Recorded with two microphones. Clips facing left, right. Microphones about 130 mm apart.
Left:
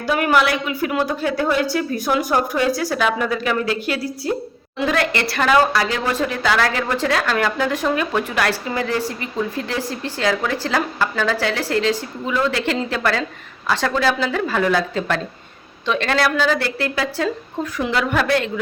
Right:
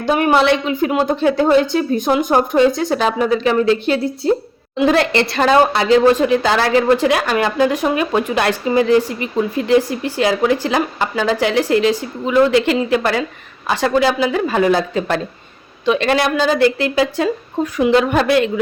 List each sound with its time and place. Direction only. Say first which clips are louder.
0.0 s a woman's voice: right 4 dB; 25° right (ahead or behind)